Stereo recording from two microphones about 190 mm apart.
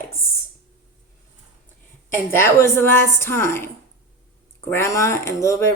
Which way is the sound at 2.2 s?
15° left (ahead or behind).